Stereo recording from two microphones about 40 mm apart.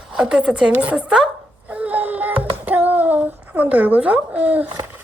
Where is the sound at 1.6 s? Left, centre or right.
Right.